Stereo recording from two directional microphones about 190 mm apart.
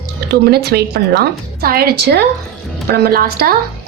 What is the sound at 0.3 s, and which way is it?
A woman's voice, 55° right (ahead or behind).